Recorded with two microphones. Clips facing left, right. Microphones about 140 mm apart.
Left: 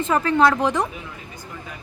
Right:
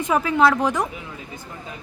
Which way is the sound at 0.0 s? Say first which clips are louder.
Even; 5° right (ahead or behind).